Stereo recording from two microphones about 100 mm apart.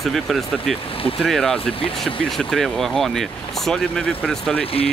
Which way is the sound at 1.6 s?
65° left (ahead or behind).